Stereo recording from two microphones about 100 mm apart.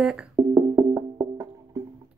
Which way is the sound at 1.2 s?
35° right (ahead or behind).